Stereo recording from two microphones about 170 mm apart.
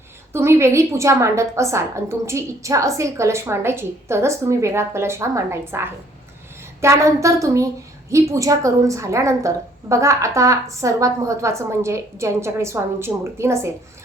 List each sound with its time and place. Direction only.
0.3 s a woman's voice: 15° right (ahead or behind)